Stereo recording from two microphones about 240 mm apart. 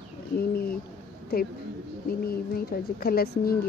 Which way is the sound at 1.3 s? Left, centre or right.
Left.